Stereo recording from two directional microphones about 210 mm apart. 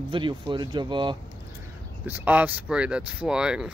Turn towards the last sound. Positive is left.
turn(degrees=-5)  # may be behind; listen again after turning